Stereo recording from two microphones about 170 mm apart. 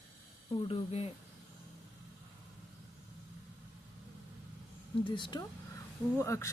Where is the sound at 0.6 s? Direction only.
35° left (ahead or behind).